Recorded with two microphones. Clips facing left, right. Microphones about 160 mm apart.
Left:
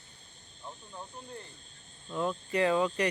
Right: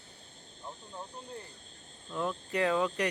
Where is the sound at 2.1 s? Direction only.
5° left (ahead or behind).